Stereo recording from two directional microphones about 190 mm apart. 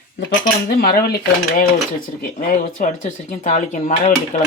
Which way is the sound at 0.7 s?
55° left (ahead or behind).